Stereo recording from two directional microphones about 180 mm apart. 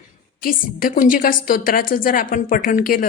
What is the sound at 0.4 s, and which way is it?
A woman's voice, 50° left (ahead or behind).